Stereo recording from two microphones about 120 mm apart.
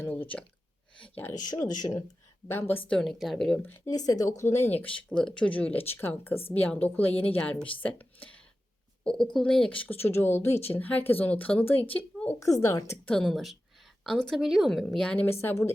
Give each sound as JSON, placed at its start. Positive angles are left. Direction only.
{"t": 0.0, "sound": "speech", "side_deg": 15}
{"t": 1.4, "sound": "speech", "side_deg": 35}
{"t": 2.5, "sound": "speech", "side_deg": 15}
{"t": 2.9, "sound": "a woman's voice", "side_deg": 0}
{"t": 3.8, "sound": "speech", "side_deg": 30}
{"t": 12.6, "sound": "speech", "side_deg": 25}
{"t": 13.1, "sound": "a woman's voice", "side_deg": 5}
{"t": 15.3, "sound": "speech", "side_deg": 20}